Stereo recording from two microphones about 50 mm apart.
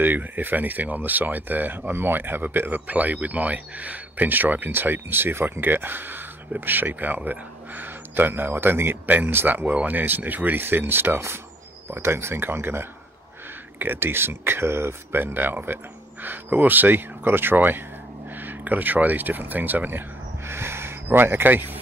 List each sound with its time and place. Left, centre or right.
0.0 s speech: right
15.3 s speech: right
20.4 s speech: right